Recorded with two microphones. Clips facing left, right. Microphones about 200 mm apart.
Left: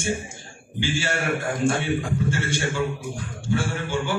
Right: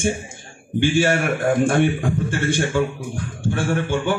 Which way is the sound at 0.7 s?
55° right (ahead or behind).